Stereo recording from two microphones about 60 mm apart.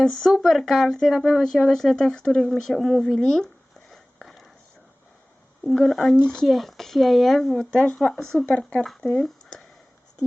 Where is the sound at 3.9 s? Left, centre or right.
Centre.